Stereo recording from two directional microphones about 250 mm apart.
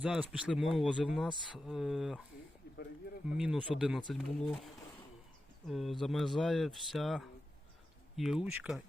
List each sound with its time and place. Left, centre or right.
0.0 s speech: centre
2.6 s a sound: left
3.3 s speech: centre